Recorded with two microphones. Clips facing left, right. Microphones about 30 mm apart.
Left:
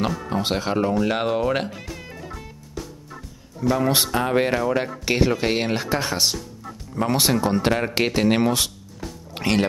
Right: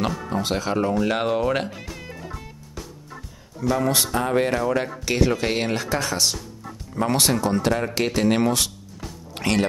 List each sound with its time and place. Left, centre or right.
0.0 s speech: centre
0.3 s speech: left
0.7 s music: centre
3.8 s speech: centre
5.3 s speech: centre; by 6.2 s left
6.9 s speech: centre
8.1 s music: centre